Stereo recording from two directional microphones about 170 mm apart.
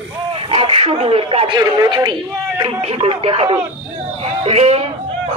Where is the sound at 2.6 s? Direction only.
35° right (ahead or behind).